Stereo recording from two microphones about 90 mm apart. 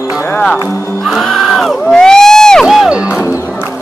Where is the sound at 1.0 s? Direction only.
Centre (ahead or behind).